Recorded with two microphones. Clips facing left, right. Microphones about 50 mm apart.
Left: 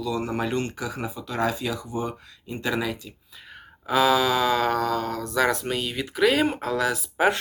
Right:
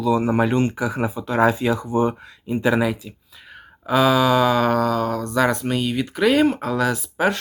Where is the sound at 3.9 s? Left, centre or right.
Centre.